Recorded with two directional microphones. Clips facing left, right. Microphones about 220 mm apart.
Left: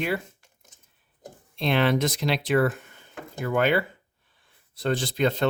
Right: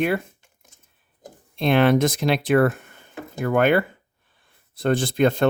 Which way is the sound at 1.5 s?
50° right (ahead or behind).